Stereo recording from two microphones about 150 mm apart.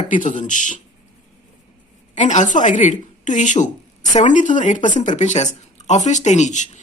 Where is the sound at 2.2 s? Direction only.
55° left (ahead or behind).